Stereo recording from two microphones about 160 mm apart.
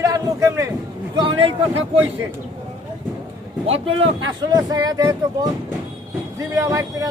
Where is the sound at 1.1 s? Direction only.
30° right (ahead or behind).